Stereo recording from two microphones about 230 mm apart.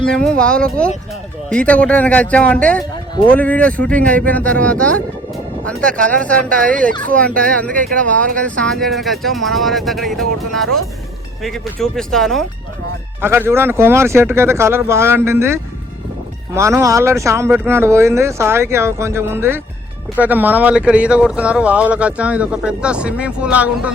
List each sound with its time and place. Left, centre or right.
0.1 s speech: centre
13.2 s speech: centre